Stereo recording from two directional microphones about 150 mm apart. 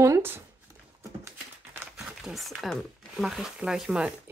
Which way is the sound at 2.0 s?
Centre (ahead or behind).